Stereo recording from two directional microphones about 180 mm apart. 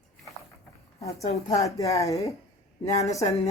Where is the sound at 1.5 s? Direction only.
15° left (ahead or behind).